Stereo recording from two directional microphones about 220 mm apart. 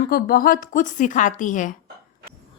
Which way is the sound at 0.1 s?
40° left (ahead or behind).